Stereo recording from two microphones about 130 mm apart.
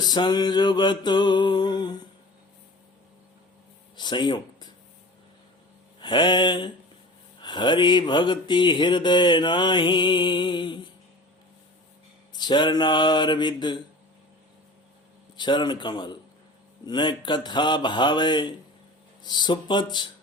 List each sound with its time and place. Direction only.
0.0 s mantra: 35° left (ahead or behind)
3.9 s a sound: 35° left (ahead or behind)
6.0 s mantra: 35° left (ahead or behind)
12.4 s mantra: 35° left (ahead or behind)
15.4 s mantra: 35° left (ahead or behind)